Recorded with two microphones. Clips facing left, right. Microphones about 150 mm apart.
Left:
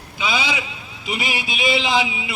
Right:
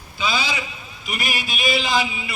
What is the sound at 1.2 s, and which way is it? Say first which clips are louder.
A man's voice: left 1 dB; 25° left (ahead or behind).